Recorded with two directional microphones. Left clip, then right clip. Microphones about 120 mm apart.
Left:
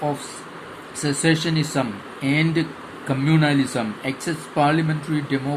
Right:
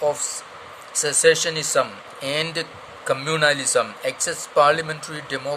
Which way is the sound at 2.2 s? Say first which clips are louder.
Left 2 dB; 60° right (ahead or behind).